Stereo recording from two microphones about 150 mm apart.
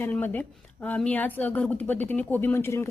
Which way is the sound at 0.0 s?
10° left (ahead or behind).